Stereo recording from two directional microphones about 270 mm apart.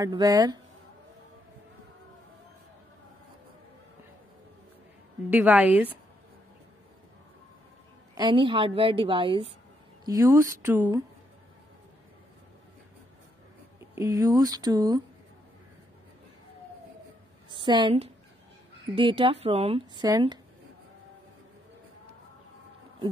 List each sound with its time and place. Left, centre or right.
0.0 s speech: centre
5.3 s a woman's voice: centre
8.1 s a woman's voice: centre
13.7 s speech: centre
17.5 s a woman's voice: centre